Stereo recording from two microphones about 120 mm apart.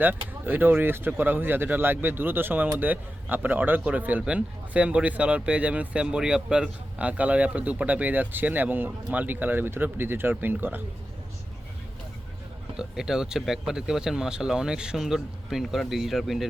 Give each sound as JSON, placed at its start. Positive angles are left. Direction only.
{"t": 0.0, "sound": "speech", "side_deg": -15}
{"t": 12.7, "sound": "speech", "side_deg": -5}